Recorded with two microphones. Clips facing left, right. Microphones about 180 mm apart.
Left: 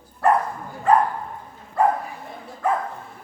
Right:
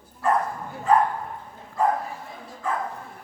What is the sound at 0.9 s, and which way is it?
Dog, 65° left (ahead or behind).